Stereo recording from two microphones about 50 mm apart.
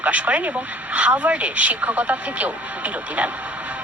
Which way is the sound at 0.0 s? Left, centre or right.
Right.